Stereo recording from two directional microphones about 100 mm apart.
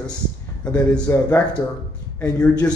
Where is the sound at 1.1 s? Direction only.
15° left (ahead or behind).